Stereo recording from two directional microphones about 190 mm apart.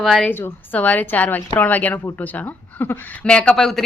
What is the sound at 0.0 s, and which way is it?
Speech, centre (ahead or behind).